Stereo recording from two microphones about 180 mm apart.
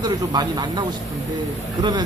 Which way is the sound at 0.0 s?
25° right (ahead or behind).